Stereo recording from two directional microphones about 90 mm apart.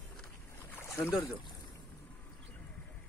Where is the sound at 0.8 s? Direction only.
30° left (ahead or behind).